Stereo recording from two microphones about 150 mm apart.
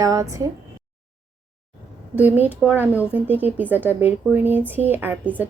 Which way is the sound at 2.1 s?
10° right (ahead or behind).